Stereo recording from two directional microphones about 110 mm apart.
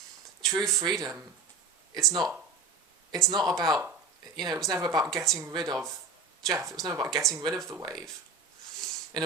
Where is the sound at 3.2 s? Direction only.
35° right (ahead or behind).